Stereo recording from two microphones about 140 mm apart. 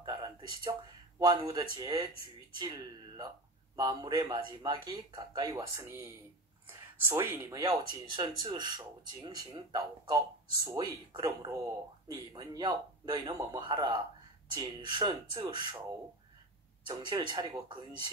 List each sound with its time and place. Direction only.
0.0 s a sound: 30° right (ahead or behind)
1.2 s speech: 30° right (ahead or behind)
7.6 s speech: 35° right (ahead or behind)
16.8 s speech: 30° right (ahead or behind)